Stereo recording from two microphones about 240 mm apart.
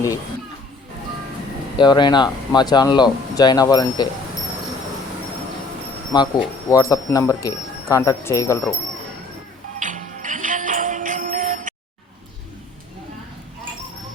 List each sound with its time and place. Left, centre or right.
1.8 s speech: centre
6.1 s speech: centre
9.8 s music: right